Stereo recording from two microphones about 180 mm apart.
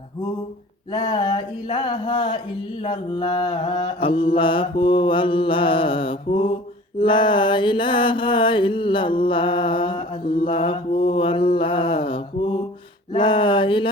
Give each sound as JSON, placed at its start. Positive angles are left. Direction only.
{"t": 0.9, "sound": "mantra", "side_deg": 25}